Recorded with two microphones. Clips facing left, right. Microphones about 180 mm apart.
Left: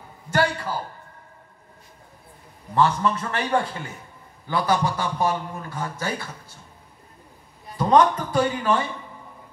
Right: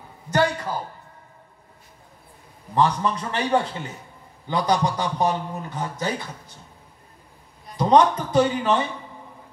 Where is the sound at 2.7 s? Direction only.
15° right (ahead or behind).